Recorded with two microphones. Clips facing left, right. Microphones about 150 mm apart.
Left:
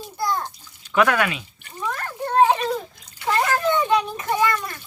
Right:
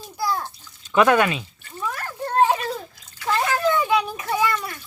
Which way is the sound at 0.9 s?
25° right (ahead or behind).